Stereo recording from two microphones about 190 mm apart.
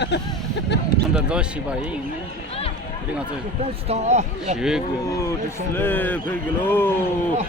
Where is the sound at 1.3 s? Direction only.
5° right (ahead or behind).